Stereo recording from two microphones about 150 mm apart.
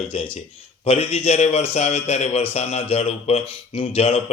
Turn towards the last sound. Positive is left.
turn(degrees=45)  # may be behind; listen again after turning